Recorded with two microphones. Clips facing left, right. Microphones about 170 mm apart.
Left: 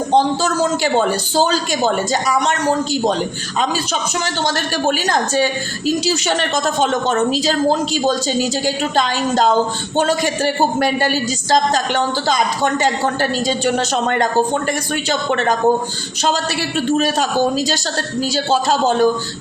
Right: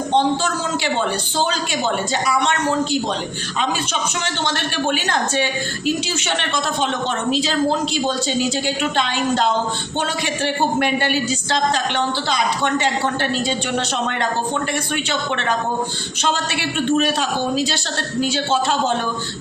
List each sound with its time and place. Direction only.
0.1 s a woman's voice: 40° left (ahead or behind)
4.4 s a woman's voice: 40° left (ahead or behind)